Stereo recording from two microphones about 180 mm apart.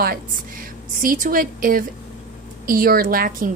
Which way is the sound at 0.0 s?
50° right (ahead or behind).